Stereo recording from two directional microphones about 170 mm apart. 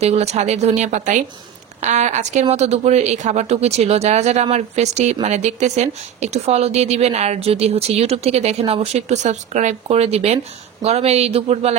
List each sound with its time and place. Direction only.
0.0 s a woman's voice: 40° right (ahead or behind)